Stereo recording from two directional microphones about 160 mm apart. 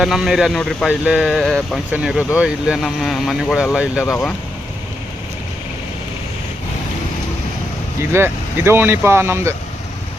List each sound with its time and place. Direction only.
0.0 s speech: 5° right (ahead or behind)
4.0 s speech: 20° left (ahead or behind)
8.1 s speech: 15° right (ahead or behind)